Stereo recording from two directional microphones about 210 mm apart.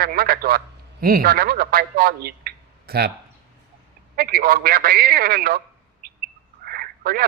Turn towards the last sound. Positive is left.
turn(degrees=-45)  # may be behind; listen again after turning